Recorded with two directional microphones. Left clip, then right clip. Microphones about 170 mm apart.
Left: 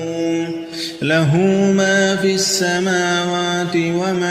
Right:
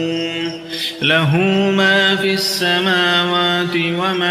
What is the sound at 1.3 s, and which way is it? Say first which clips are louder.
Mantra: even; 30° left (ahead or behind).